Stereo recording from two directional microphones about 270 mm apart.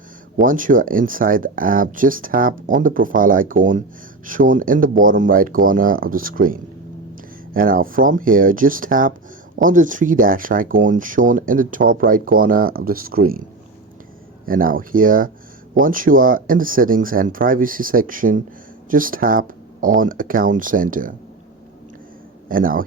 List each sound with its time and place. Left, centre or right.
0.4 s speech: right
14.4 s speech: right
22.4 s speech: right